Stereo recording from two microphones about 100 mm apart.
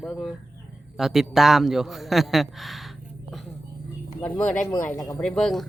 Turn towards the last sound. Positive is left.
turn(degrees=5)  # may be behind; listen again after turning